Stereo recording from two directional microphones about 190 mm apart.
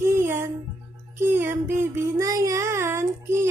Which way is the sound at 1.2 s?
10° right (ahead or behind).